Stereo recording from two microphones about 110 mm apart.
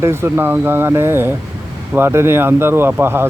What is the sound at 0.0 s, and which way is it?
Speech, 20° right (ahead or behind).